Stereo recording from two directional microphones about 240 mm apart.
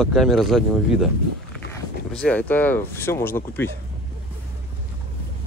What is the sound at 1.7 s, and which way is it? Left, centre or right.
Speech, centre.